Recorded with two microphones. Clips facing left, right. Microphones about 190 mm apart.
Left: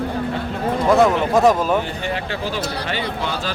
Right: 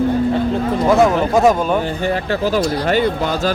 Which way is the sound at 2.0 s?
45° right (ahead or behind).